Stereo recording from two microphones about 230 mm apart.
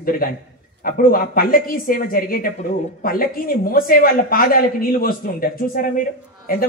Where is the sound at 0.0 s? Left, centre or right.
Left.